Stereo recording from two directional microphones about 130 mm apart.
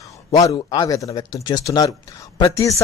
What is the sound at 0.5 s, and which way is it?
Speech, 30° left (ahead or behind).